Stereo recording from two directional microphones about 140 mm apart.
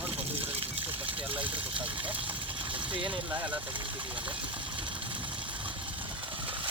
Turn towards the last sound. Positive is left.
turn(degrees=-40)  # may be behind; listen again after turning